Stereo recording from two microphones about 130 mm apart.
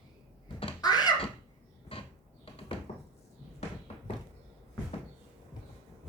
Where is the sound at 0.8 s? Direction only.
30° left (ahead or behind).